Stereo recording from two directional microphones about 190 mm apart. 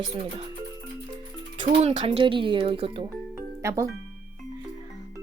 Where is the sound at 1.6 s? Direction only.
30° right (ahead or behind).